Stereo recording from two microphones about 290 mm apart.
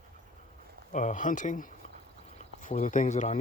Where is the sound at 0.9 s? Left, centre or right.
Left.